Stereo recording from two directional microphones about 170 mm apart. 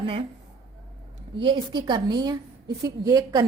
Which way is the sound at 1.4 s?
30° right (ahead or behind).